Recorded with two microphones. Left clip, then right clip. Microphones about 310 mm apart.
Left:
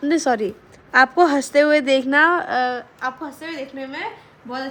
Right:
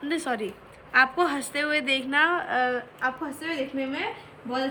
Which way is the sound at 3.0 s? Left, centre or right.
Centre.